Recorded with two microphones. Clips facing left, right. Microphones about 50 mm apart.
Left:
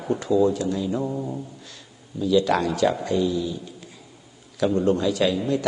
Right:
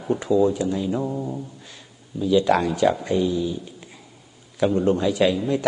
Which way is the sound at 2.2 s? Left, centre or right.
Right.